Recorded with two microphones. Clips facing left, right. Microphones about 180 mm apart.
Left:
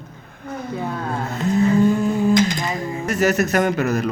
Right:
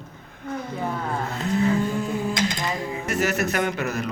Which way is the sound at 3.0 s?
40° left (ahead or behind).